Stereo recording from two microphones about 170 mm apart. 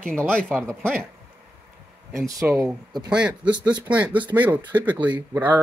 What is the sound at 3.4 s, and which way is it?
Speech, 25° right (ahead or behind).